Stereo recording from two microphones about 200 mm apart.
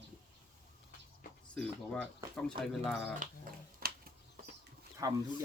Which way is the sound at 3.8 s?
50° right (ahead or behind).